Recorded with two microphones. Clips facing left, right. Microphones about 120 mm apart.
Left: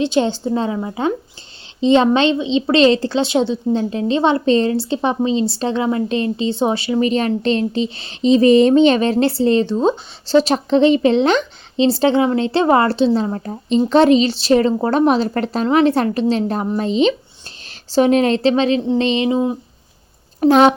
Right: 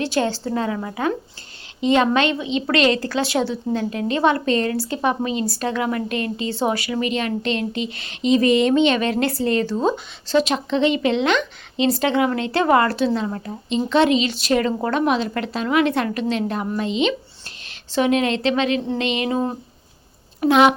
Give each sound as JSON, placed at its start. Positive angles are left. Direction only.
{"t": 0.0, "sound": "a woman's voice", "side_deg": 20}
{"t": 19.3, "sound": "speech", "side_deg": 10}
{"t": 20.4, "sound": "a woman's voice", "side_deg": 35}